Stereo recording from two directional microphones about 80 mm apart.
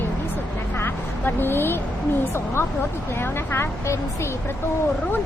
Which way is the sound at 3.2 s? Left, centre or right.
Left.